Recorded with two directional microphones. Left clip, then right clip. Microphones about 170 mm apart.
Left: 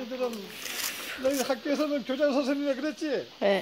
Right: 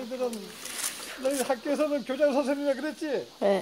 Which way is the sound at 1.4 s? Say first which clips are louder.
Right 1 dB; 50° left (ahead or behind).